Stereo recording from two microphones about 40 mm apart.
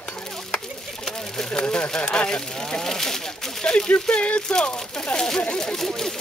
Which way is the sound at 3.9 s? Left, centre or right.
Left.